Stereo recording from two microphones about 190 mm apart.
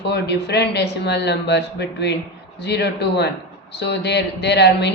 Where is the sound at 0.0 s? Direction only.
60° left (ahead or behind).